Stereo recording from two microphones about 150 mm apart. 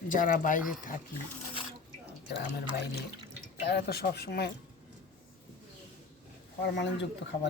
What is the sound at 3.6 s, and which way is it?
Speech, 90° left.